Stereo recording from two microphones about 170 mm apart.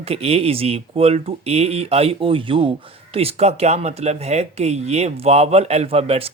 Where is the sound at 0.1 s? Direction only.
35° right (ahead or behind).